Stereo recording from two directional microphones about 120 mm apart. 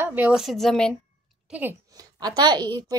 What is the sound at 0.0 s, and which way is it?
Speech, 15° right (ahead or behind).